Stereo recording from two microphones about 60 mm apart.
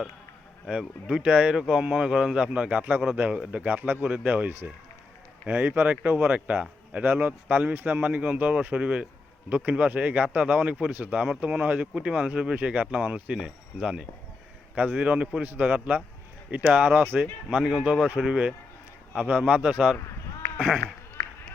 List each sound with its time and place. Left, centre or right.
0.6 s a man's voice: centre
17.6 s a man's voice: centre